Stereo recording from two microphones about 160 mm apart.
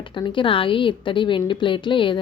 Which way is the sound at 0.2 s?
30° left (ahead or behind).